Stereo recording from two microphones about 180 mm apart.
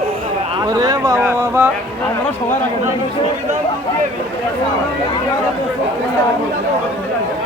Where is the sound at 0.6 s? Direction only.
20° right (ahead or behind).